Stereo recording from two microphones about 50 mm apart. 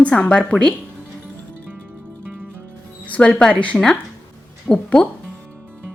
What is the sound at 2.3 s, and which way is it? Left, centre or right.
Music, right.